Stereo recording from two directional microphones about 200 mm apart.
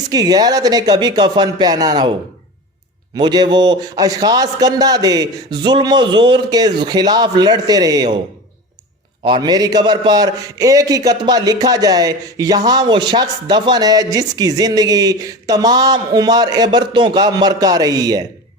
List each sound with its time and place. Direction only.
0.1 s a man's voice: 20° right (ahead or behind)
3.2 s a man's voice: 20° right (ahead or behind)
9.2 s a man's voice: 20° right (ahead or behind)